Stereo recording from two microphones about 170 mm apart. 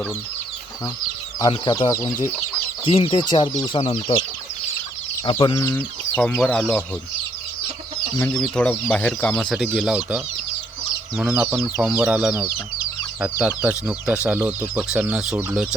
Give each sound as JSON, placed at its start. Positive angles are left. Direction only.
{"t": 1.4, "sound": "speech", "side_deg": 25}
{"t": 2.8, "sound": "speech", "side_deg": 30}
{"t": 5.2, "sound": "speech", "side_deg": 30}
{"t": 5.7, "sound": "speech", "side_deg": 10}
{"t": 8.2, "sound": "speech", "side_deg": 5}
{"t": 9.6, "sound": "speech", "side_deg": -5}
{"t": 11.2, "sound": "speech", "side_deg": -10}